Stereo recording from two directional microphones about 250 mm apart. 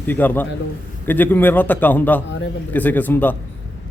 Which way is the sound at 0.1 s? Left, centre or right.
Centre.